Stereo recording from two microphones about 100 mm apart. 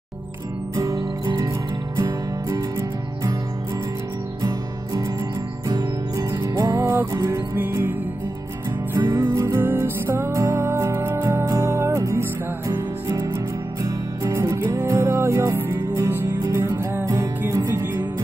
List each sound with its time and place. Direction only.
1.2 s music: 35° right (ahead or behind)
4.4 s music: 35° right (ahead or behind)
8.9 s music: 30° right (ahead or behind)